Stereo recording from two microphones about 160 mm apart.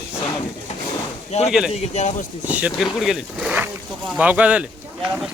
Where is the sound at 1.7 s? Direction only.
45° left (ahead or behind).